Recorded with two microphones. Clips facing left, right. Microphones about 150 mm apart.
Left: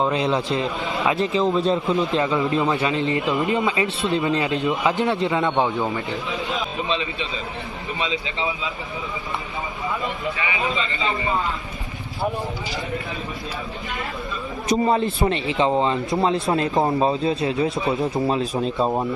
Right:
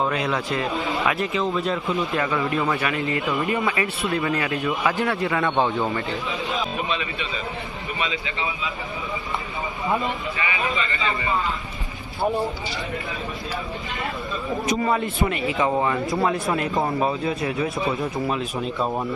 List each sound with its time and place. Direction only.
0.0 s a man's voice: 25° left (ahead or behind)
6.8 s a man's voice: 25° left (ahead or behind)
14.8 s a man's voice: 30° left (ahead or behind)